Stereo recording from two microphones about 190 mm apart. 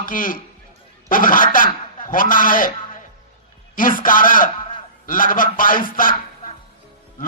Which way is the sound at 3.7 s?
45° left (ahead or behind).